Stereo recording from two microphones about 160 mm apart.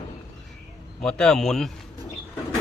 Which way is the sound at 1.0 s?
5° left (ahead or behind).